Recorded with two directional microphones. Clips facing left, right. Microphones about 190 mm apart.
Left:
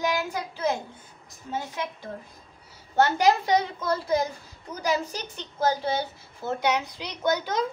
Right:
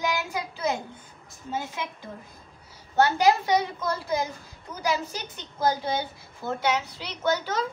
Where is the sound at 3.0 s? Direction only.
10° right (ahead or behind).